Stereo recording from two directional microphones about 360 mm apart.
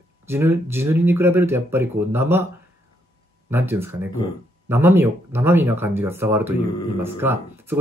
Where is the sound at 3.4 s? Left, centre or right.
Centre.